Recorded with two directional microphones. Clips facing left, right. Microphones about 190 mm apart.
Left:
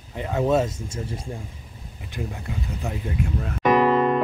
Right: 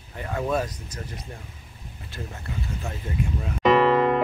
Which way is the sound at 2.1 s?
15° left (ahead or behind).